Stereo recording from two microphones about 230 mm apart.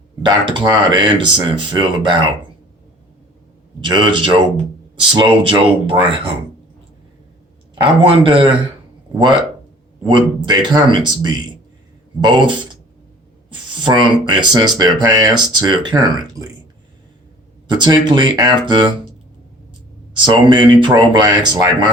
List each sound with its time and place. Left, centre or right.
0.3 s speech: centre
3.8 s speech: right
7.8 s speech: right
10.1 s speech: centre
13.8 s speech: centre
17.7 s speech: centre
20.2 s speech: right